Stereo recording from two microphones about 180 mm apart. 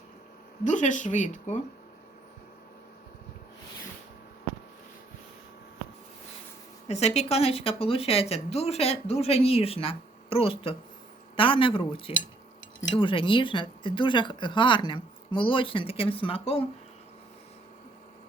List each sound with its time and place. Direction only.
0.6 s speech: 45° left (ahead or behind)
6.8 s a woman's voice: 35° left (ahead or behind)